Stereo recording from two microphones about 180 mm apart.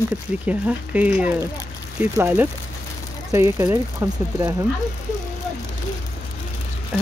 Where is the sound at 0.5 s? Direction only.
10° right (ahead or behind).